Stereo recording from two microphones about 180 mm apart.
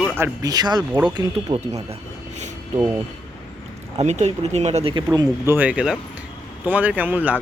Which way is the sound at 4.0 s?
40° right (ahead or behind).